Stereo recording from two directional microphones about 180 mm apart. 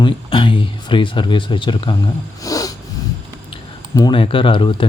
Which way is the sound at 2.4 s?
20° left (ahead or behind).